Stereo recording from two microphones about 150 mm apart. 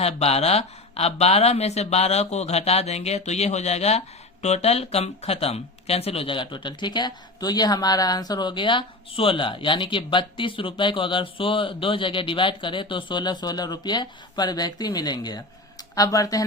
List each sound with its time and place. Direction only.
0.0 s speech: 45° left (ahead or behind); by 16.4 s 25° left (ahead or behind)